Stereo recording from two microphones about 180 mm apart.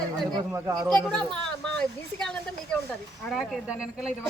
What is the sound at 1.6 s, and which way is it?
Speech, 5° left (ahead or behind).